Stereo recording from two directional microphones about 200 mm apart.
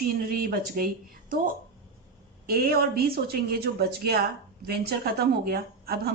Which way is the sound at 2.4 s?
50° right (ahead or behind).